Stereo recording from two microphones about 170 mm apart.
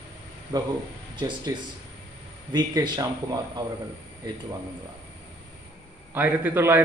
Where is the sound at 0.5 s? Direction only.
20° right (ahead or behind).